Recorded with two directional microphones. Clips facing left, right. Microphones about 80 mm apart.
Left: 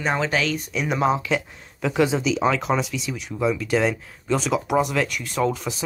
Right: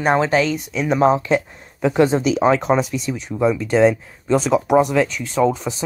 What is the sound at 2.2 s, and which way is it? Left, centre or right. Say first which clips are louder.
Speech: right 5 dB; right.